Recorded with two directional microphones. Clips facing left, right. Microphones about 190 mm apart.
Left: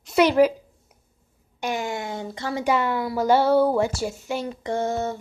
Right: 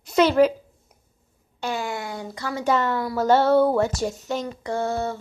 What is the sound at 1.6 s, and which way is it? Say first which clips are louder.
Speech: left 1 dB; 15° left (ahead or behind).